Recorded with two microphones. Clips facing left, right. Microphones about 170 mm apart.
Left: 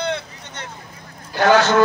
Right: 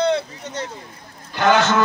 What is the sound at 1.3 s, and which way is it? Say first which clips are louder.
Speech: left 2 dB; 35° left (ahead or behind).